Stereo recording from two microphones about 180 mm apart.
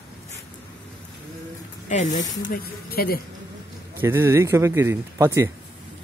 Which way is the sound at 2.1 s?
20° left (ahead or behind).